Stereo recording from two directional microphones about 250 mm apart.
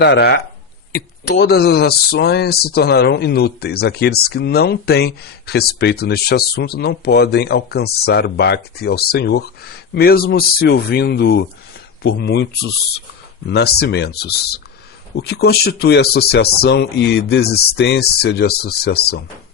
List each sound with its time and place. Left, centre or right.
0.0 s speech: left
13.5 s speech: left